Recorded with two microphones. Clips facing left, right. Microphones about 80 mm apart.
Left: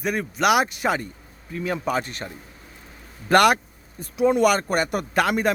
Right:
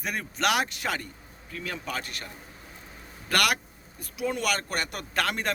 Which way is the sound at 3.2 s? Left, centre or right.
Left.